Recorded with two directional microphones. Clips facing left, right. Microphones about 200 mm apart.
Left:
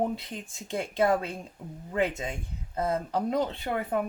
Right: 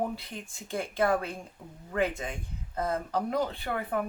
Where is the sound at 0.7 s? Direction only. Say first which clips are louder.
Left 2 dB; 20° left (ahead or behind).